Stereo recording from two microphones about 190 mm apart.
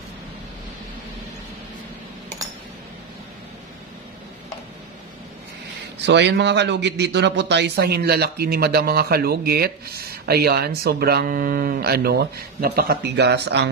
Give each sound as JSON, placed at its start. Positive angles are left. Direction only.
{"t": 5.9, "sound": "speech", "side_deg": -65}